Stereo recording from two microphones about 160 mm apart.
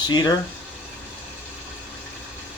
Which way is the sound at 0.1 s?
25° left (ahead or behind).